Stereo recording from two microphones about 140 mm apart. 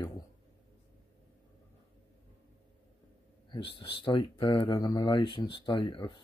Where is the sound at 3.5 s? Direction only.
40° left (ahead or behind).